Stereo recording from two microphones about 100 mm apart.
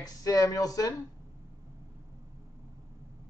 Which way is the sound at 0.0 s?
35° left (ahead or behind).